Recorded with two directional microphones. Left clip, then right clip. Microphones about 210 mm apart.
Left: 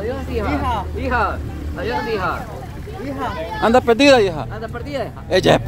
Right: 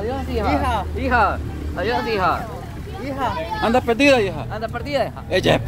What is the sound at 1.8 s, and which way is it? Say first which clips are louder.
Speech: right 1 dB; 55° right (ahead or behind).